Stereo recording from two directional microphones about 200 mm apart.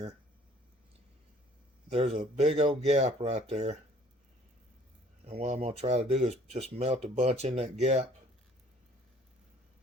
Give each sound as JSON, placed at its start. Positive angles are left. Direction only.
{"t": 1.9, "sound": "speech", "side_deg": -30}
{"t": 5.2, "sound": "speech", "side_deg": -30}